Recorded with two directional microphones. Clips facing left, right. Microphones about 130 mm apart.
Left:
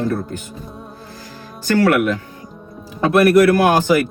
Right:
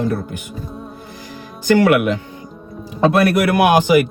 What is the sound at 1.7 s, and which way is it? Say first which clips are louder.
A man's voice: right 2 dB; 20° right (ahead or behind).